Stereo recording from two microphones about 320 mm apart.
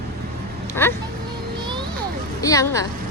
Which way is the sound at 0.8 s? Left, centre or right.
Centre.